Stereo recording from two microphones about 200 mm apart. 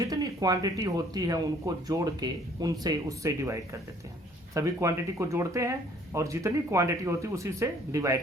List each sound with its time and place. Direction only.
0.0 s speech: 15° right (ahead or behind)